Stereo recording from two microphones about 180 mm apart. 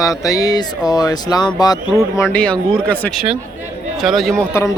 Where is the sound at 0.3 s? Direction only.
20° left (ahead or behind).